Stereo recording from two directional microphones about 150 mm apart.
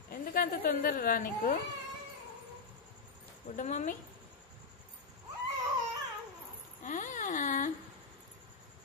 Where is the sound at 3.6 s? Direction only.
55° left (ahead or behind).